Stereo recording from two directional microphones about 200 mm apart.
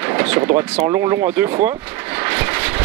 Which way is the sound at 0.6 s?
15° right (ahead or behind).